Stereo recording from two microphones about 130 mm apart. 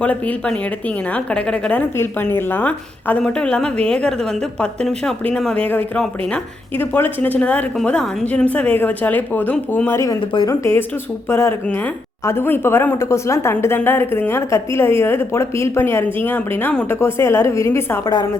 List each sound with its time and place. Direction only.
0.0 s a woman's voice: 10° left (ahead or behind)
18.0 s a woman's voice: 35° left (ahead or behind)